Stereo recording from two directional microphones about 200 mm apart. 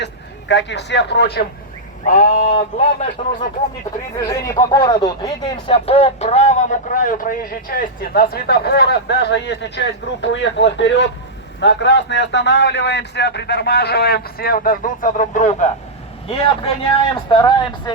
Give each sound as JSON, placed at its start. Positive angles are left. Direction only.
{"t": 0.0, "sound": "speech", "side_deg": 60}
{"t": 2.0, "sound": "speech", "side_deg": 40}
{"t": 4.2, "sound": "a man's voice", "side_deg": 15}
{"t": 16.3, "sound": "speech", "side_deg": 30}